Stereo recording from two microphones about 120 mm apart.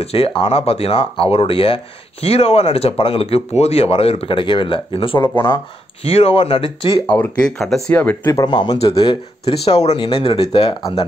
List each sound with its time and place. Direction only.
0.0 s speech: 55° left (ahead or behind)
7.5 s speech: centre (ahead or behind)
7.9 s speech: 15° left (ahead or behind)
8.5 s speech: 35° left (ahead or behind); by 11.1 s 55° left (ahead or behind)